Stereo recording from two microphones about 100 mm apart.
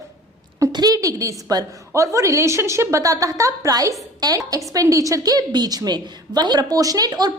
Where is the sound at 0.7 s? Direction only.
40° right (ahead or behind).